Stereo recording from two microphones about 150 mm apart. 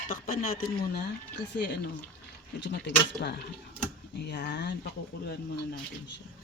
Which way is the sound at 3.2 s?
90° left.